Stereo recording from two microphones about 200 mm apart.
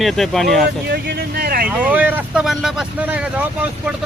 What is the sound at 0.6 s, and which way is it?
Speech, 50° right (ahead or behind).